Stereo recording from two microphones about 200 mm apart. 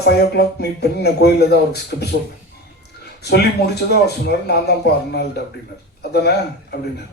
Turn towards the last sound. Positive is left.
turn(degrees=55)  # may be behind; listen again after turning